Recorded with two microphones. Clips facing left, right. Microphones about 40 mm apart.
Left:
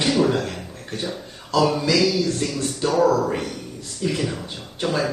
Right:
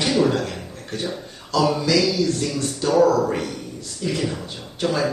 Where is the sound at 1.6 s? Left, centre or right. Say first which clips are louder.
Even; centre.